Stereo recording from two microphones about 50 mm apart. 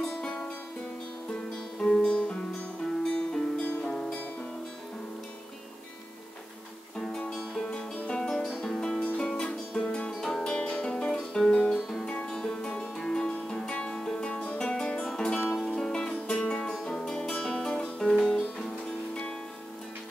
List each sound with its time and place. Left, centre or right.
0.0 s music: centre
1.8 s music: centre
2.0 s music: left
3.6 s music: left
3.9 s music: centre
7.0 s music: centre
9.0 s music: left
9.3 s music: centre